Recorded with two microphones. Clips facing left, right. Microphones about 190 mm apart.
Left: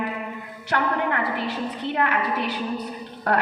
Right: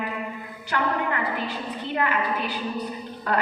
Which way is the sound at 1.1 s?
65° left (ahead or behind).